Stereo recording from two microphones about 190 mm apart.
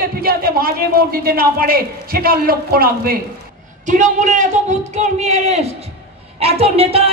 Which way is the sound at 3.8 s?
40° right (ahead or behind).